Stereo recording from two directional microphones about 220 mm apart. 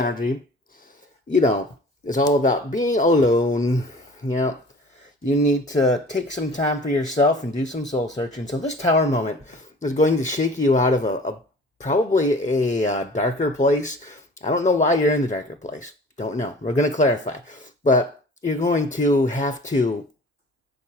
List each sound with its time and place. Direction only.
0.0 s speech: 40° left (ahead or behind)
2.0 s speech: 35° left (ahead or behind)